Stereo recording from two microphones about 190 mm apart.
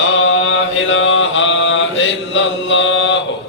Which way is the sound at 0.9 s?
85° left.